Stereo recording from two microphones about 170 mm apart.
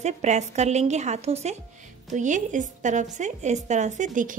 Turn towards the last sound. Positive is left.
turn(degrees=-50)  # may be behind; listen again after turning